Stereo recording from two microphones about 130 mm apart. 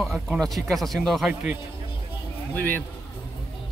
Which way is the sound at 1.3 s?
10° right (ahead or behind).